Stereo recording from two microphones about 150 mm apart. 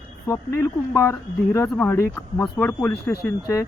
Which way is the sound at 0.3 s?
20° left (ahead or behind).